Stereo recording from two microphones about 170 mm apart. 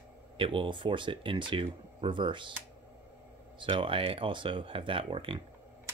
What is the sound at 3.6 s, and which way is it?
Speech, 30° right (ahead or behind).